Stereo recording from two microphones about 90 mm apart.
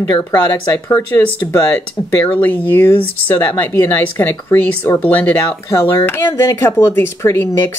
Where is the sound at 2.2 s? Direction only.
20° left (ahead or behind).